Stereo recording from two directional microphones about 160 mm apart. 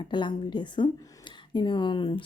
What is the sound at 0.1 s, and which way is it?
Speech, 30° left (ahead or behind).